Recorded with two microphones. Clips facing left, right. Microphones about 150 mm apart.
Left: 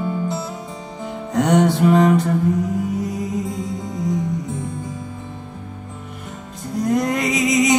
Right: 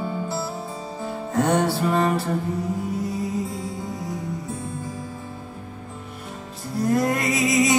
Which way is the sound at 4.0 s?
20° left (ahead or behind).